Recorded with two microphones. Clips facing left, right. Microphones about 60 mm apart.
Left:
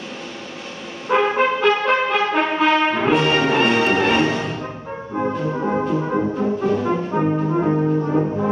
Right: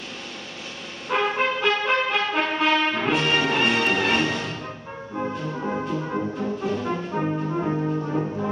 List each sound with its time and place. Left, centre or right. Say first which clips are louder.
1.0 s music: left 6 dB; centre
5.2 s brass instrument: left 6 dB; left
6.3 s brass instrument: left 7 dB; centre
7.1 s brass instrument: left 6 dB; centre